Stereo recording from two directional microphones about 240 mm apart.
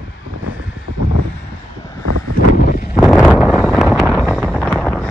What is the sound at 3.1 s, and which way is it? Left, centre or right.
Wind noise, centre.